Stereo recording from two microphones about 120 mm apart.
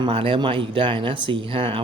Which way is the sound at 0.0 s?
50° right (ahead or behind).